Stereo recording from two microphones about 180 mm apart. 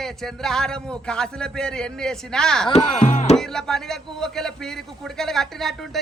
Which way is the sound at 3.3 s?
5° left (ahead or behind).